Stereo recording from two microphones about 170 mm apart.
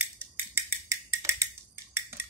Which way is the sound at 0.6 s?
15° right (ahead or behind).